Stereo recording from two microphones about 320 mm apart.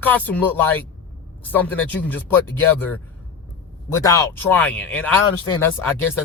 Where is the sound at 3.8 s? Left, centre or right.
Centre.